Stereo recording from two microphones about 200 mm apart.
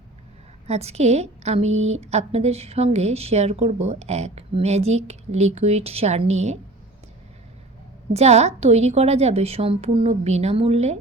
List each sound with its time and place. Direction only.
0.7 s a woman's voice: 30° right (ahead or behind)
8.1 s a woman's voice: 35° right (ahead or behind)